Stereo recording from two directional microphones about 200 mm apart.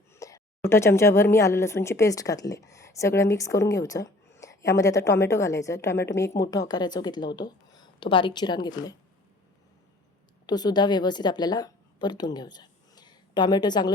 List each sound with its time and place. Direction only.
0.1 s a woman's voice: 15° left (ahead or behind)
10.4 s a woman's voice: 20° left (ahead or behind)